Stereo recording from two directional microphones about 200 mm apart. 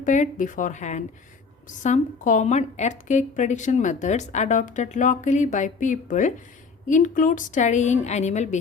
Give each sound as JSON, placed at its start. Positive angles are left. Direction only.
{"t": 0.0, "sound": "a woman's voice", "side_deg": 40}